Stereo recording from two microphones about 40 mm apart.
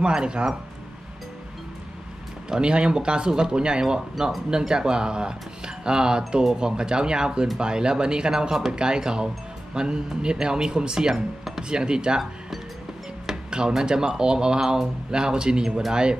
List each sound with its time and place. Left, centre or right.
0.0 s speech: right
2.6 s speech: right
13.5 s speech: centre